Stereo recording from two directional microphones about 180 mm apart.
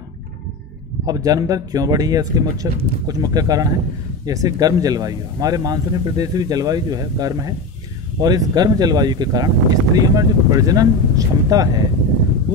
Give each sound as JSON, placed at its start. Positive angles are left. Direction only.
{"t": 1.0, "sound": "speech", "side_deg": -20}